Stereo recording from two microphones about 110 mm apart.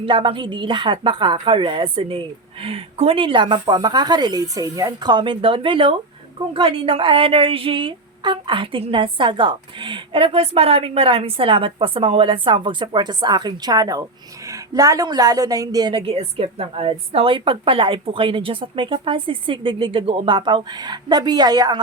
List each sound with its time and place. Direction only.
0.0 s speech: 50° right (ahead or behind)